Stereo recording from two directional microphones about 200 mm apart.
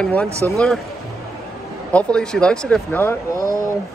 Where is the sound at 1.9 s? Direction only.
5° left (ahead or behind).